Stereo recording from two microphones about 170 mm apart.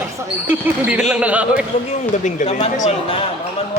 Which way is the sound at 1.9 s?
45° left (ahead or behind).